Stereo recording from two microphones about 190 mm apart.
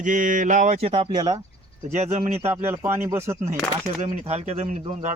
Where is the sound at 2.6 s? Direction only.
10° right (ahead or behind).